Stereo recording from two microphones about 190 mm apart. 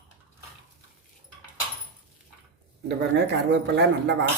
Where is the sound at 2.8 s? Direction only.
65° right (ahead or behind).